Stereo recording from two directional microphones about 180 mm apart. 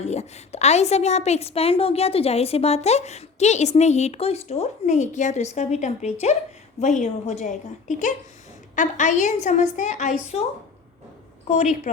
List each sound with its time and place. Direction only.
0.0 s a woman's voice: 40° left (ahead or behind)
11.4 s a woman's voice: 40° left (ahead or behind)